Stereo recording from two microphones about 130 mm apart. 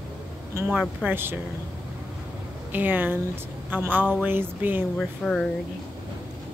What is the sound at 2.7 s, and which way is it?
A woman's voice, 15° right (ahead or behind).